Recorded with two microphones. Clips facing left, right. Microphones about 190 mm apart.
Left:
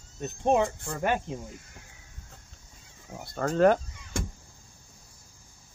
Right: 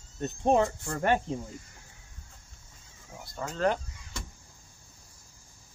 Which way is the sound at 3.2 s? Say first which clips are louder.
Left 7 dB; 55° left (ahead or behind).